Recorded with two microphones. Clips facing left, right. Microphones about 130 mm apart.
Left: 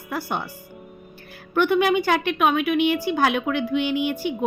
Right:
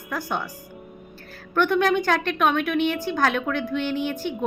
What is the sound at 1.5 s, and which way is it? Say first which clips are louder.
A woman's voice: left 1 dB; 10° left (ahead or behind).